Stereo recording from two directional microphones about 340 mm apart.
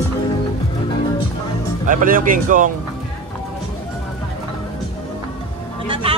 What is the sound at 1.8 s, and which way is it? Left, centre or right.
Speech, right.